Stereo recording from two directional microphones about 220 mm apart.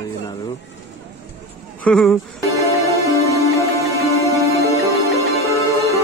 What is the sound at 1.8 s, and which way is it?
Speech, centre (ahead or behind).